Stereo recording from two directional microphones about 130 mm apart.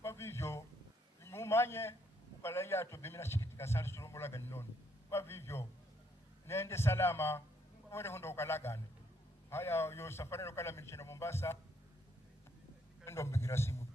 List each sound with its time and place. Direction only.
0.0 s a sound: 20° left (ahead or behind)
2.4 s a man's voice: 20° left (ahead or behind)
13.1 s a man's voice: 20° left (ahead or behind)